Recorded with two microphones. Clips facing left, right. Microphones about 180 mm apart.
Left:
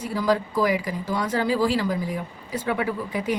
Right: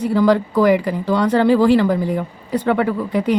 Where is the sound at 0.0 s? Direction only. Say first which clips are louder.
Right 8 dB; 65° right (ahead or behind).